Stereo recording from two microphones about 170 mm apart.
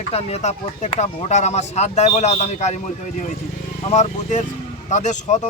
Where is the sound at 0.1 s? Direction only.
35° left (ahead or behind).